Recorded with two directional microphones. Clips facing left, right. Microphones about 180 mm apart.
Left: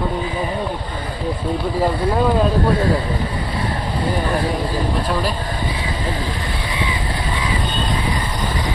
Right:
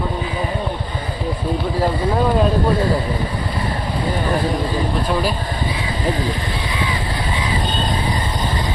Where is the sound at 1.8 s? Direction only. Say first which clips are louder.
Left 1 dB; centre (ahead or behind).